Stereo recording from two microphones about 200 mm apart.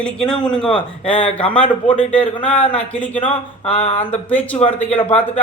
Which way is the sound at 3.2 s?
25° left (ahead or behind).